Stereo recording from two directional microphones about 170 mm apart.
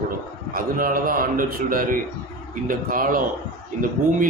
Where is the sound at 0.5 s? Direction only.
55° right (ahead or behind).